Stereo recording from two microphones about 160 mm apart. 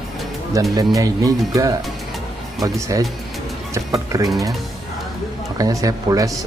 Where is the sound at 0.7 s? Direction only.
20° right (ahead or behind).